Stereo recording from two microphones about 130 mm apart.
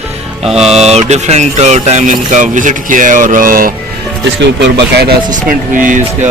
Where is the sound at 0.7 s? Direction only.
55° right (ahead or behind); by 3.7 s 90° right.